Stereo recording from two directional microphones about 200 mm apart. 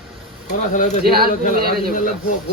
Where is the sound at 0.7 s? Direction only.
35° left (ahead or behind).